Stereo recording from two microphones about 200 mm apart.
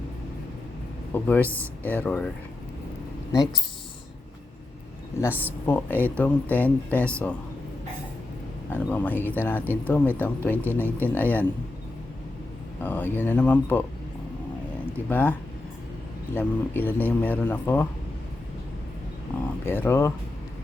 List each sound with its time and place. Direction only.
1.1 s a man's voice: 10° left (ahead or behind)
3.3 s speech: 20° left (ahead or behind)
5.6 s a man's voice: 10° left (ahead or behind)
8.7 s a man's voice: 10° left (ahead or behind)
12.8 s a man's voice: 10° left (ahead or behind)
15.1 s a man's voice: 10° left (ahead or behind)
19.6 s a man's voice: 10° left (ahead or behind)